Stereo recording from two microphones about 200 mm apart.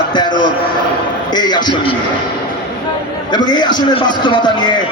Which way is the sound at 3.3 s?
20° left (ahead or behind).